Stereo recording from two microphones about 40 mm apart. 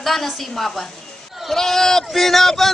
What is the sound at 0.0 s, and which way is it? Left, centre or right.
Speech, centre.